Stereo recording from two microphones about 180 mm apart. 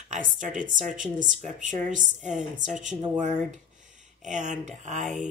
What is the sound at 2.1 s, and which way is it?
A woman's voice, 45° right (ahead or behind).